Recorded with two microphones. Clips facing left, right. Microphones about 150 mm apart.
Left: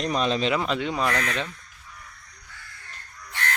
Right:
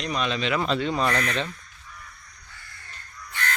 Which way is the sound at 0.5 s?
15° left (ahead or behind).